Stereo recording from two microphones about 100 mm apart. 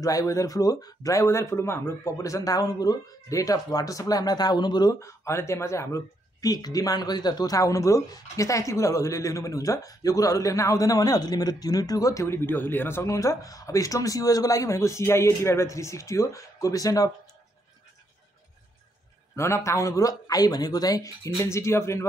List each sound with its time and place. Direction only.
0.0 s speech: 35° left (ahead or behind)
5.0 s speech: 30° left (ahead or behind)
19.3 s speech: 30° left (ahead or behind)